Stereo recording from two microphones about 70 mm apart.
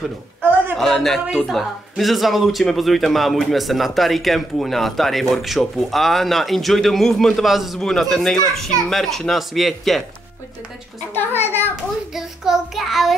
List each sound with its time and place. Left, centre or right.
0.7 s speech: centre
11.1 s a child's voice: left
12.1 s speech: centre